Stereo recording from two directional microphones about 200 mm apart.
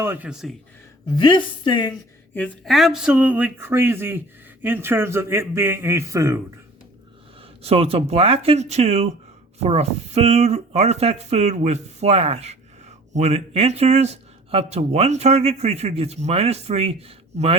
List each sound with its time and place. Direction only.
0.0 s speech: 10° right (ahead or behind)
1.1 s a woman's voice: 25° left (ahead or behind)
1.9 s speech: 5° left (ahead or behind); by 6.4 s 15° right (ahead or behind)
7.4 s speech: 30° right (ahead or behind)